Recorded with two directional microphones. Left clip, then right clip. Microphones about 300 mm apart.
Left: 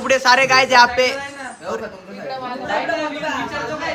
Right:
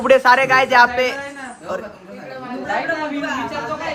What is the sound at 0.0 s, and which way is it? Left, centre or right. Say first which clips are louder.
A man's voice: right 2 dB; centre.